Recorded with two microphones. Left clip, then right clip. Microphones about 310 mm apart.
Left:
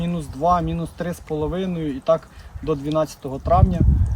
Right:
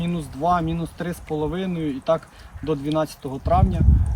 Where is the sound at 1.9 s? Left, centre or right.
Centre.